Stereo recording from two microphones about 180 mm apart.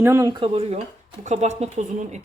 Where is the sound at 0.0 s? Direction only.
15° right (ahead or behind).